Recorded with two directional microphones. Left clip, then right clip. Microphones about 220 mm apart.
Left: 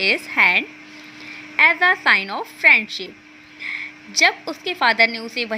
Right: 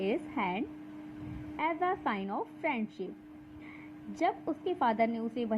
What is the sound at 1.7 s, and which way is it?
Speech, 30° left (ahead or behind).